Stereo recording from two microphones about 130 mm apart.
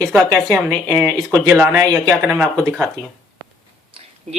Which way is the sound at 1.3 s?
20° right (ahead or behind).